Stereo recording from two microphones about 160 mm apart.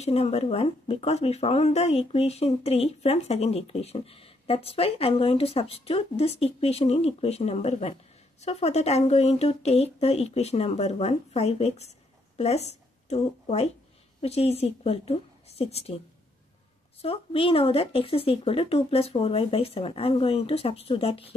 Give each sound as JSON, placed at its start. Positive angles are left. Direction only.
{"t": 0.0, "sound": "speech", "side_deg": 40}
{"t": 17.0, "sound": "speech", "side_deg": 35}